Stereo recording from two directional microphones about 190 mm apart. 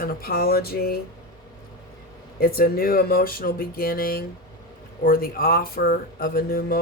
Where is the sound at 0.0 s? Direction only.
50° left (ahead or behind).